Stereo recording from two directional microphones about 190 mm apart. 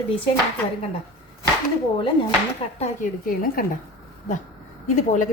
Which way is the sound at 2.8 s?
45° left (ahead or behind).